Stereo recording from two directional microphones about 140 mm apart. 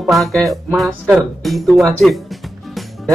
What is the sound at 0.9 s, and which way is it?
Speech, 15° right (ahead or behind).